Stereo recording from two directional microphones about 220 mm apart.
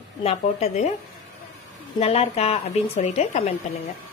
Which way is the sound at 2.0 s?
30° left (ahead or behind).